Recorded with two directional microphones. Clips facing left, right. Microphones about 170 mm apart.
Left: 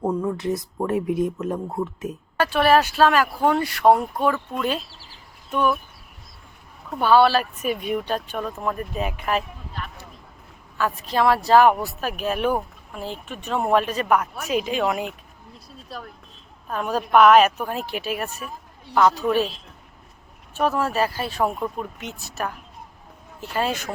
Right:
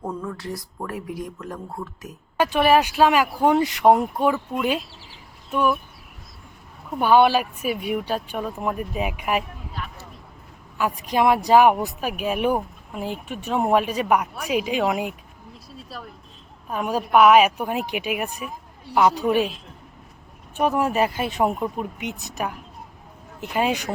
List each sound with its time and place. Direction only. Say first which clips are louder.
0.1 s speech: left 7 dB; 15° left (ahead or behind)
2.4 s speech: even; 15° right (ahead or behind)
7.0 s speech: even; 15° right (ahead or behind)